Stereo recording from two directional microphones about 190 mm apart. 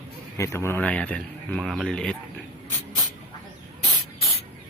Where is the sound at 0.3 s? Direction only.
15° left (ahead or behind).